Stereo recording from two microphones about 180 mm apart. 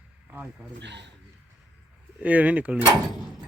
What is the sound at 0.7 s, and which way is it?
Speech, 80° right.